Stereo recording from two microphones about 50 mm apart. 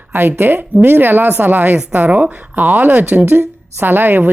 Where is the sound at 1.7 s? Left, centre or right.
Right.